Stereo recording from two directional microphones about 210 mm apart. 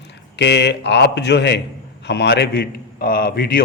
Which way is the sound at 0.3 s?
55° left (ahead or behind).